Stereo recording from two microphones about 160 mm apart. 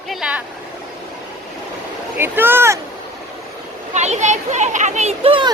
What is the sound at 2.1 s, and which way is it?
Speech, 15° right (ahead or behind).